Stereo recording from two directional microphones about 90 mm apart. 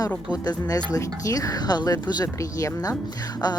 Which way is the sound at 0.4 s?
40° left (ahead or behind).